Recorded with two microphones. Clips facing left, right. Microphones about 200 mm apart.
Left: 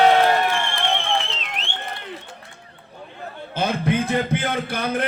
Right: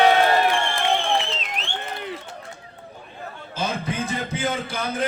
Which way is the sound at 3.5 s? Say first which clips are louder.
Left 5 dB; 60° left (ahead or behind).